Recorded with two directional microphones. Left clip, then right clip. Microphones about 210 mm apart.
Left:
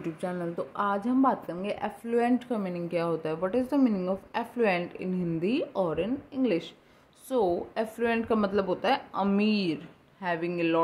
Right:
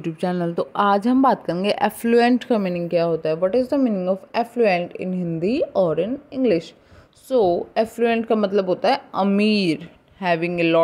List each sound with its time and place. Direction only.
0.0 s speech: 45° right (ahead or behind)